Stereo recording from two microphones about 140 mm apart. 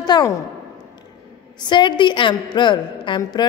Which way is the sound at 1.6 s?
35° left (ahead or behind).